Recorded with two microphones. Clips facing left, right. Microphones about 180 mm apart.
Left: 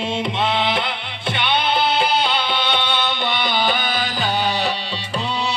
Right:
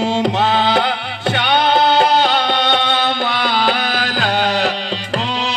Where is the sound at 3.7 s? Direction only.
90° right.